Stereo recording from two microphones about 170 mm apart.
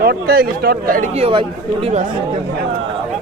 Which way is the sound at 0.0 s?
65° right (ahead or behind).